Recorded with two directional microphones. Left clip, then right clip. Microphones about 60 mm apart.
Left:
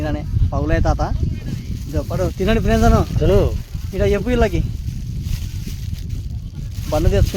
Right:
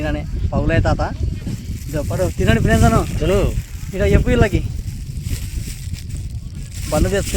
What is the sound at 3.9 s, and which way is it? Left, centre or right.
Speech, right.